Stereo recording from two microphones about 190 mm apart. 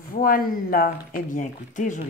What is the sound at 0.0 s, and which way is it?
Speech, 50° left (ahead or behind).